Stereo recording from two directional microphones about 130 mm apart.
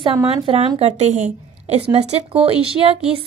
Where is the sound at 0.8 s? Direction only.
60° right (ahead or behind).